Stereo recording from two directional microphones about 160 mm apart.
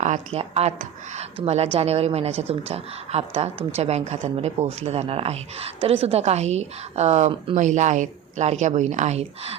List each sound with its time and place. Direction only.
0.0 s a woman's voice: 45° right (ahead or behind)
7.5 s a woman's voice: 50° right (ahead or behind)